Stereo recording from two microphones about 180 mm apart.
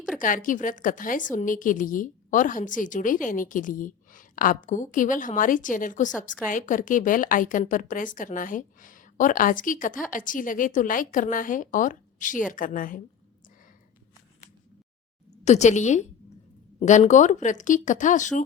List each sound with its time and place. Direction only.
0.2 s a woman's voice: 50° left (ahead or behind)
15.4 s a woman's voice: 40° left (ahead or behind)